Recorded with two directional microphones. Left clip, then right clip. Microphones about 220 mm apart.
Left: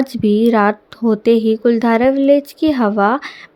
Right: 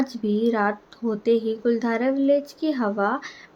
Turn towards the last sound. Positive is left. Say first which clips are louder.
# left 9 dB
turn(degrees=35)  # may be behind; listen again after turning